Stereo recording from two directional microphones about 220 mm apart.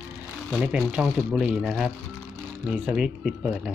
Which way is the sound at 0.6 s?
5° right (ahead or behind).